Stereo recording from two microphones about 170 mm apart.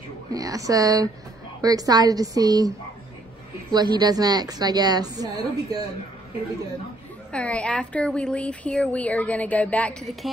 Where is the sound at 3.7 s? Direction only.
25° right (ahead or behind).